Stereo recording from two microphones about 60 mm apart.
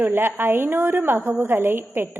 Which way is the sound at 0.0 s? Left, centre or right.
Right.